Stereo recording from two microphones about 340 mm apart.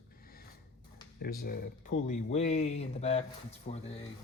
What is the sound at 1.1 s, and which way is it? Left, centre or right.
Speech, left.